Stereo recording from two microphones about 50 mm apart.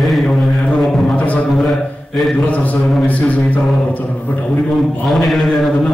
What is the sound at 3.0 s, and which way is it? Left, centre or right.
Speech, left.